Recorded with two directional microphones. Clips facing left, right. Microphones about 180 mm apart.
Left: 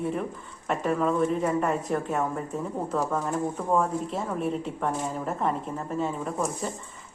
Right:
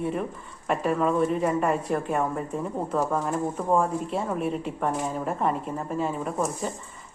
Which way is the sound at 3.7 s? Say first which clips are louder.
Right 1 dB; 5° right (ahead or behind).